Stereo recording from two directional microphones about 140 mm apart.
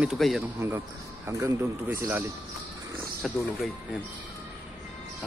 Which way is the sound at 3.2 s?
5° right (ahead or behind).